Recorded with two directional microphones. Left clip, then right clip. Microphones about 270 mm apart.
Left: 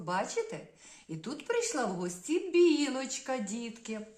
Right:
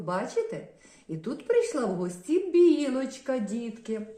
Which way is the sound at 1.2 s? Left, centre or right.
Centre.